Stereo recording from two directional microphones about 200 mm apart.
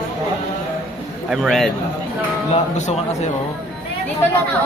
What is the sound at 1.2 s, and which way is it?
Speech, centre (ahead or behind).